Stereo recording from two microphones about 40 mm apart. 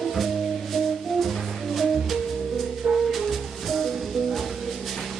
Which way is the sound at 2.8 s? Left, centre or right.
Centre.